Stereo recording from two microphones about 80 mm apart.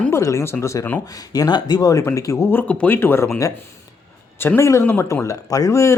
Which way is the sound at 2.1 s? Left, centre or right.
Left.